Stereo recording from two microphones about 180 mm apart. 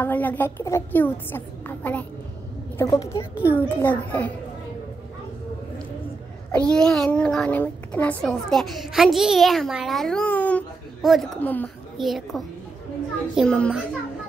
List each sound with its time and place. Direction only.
0.0 s a woman's voice: 10° left (ahead or behind)
6.5 s a child's voice: 5° left (ahead or behind)